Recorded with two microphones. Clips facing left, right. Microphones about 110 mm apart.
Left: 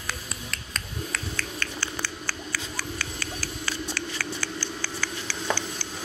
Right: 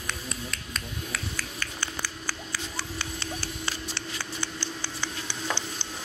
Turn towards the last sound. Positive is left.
turn(degrees=-20)  # may be behind; listen again after turning